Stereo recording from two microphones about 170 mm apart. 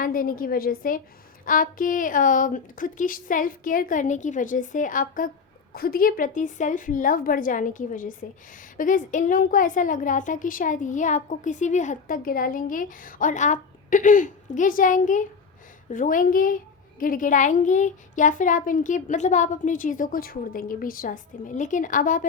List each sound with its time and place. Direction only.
0.0 s a woman's voice: 55° left (ahead or behind)